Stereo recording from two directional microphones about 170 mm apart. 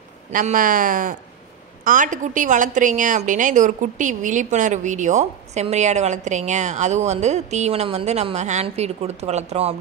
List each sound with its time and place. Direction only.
0.3 s a woman's voice: 50° right (ahead or behind)